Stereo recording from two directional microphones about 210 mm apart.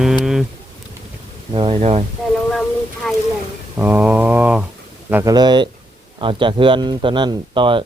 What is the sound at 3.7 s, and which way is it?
Mantra, 10° right (ahead or behind).